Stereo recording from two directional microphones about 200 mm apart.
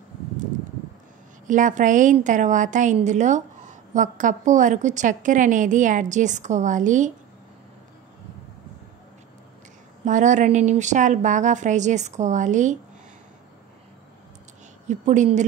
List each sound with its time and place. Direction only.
1.5 s a woman's voice: 40° right (ahead or behind)
10.0 s a woman's voice: 40° right (ahead or behind)
14.9 s a woman's voice: 35° right (ahead or behind)